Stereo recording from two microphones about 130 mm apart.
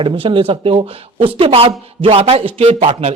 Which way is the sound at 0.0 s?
40° right (ahead or behind).